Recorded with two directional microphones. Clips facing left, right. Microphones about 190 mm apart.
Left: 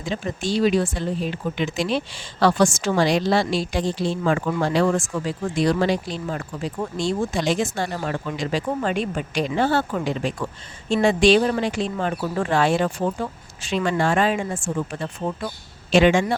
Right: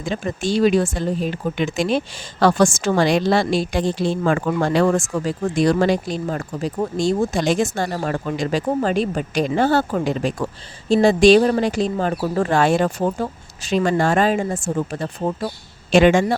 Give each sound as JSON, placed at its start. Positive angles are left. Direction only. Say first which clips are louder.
{"t": 0.0, "sound": "speech", "louder": "right 3 dB", "side_deg": -50}